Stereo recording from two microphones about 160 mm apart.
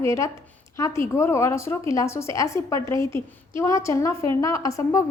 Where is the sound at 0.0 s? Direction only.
15° left (ahead or behind).